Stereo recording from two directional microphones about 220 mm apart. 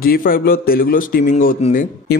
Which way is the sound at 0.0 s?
40° left (ahead or behind).